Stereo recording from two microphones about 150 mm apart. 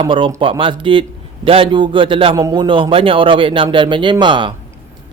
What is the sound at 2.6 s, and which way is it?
Speech, 35° right (ahead or behind).